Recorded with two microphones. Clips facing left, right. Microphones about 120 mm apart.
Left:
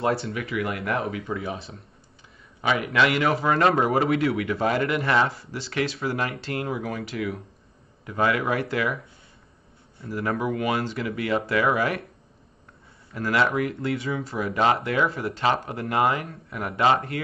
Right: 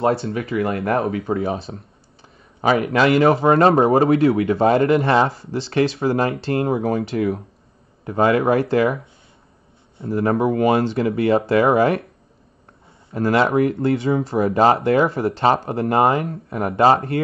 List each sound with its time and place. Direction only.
0.0 s a man's voice: 25° right (ahead or behind)
13.1 s a man's voice: 30° right (ahead or behind)